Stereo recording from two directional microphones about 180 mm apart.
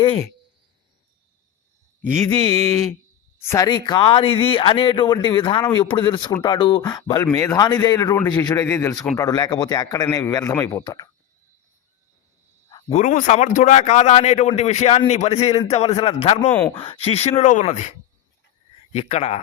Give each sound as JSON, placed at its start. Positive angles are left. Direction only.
{"t": 0.0, "sound": "speech", "side_deg": 25}
{"t": 2.4, "sound": "speech", "side_deg": 20}
{"t": 12.9, "sound": "a man's voice", "side_deg": 45}
{"t": 16.5, "sound": "speech", "side_deg": 10}
{"t": 16.7, "sound": "a man's voice", "side_deg": 30}
{"t": 18.9, "sound": "a man's voice", "side_deg": 35}